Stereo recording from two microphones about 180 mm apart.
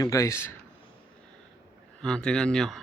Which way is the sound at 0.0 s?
20° left (ahead or behind).